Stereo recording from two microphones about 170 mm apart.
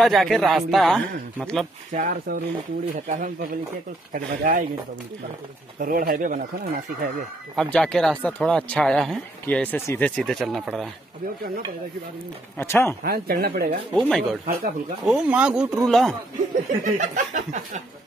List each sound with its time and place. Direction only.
0.0 s speech: centre (ahead or behind)
1.9 s chuckle: 50° right (ahead or behind)
5.8 s speech: 55° right (ahead or behind)
7.5 s speech: 5° left (ahead or behind)
12.5 s speech: 15° left (ahead or behind)
13.0 s speech: 65° right (ahead or behind)
13.9 s speech: 5° left (ahead or behind)
14.4 s speech: 60° right (ahead or behind)
15.0 s speech: 5° right (ahead or behind)
16.8 s chuckle: 50° right (ahead or behind)